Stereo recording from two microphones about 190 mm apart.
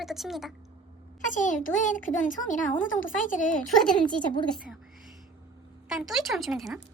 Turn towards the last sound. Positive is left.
turn(degrees=0)  # may be behind; listen again after turning